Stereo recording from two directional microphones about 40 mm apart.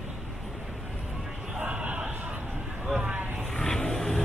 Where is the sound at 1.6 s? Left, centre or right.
Right.